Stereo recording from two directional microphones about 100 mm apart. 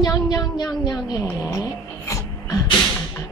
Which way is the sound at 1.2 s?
35° left (ahead or behind).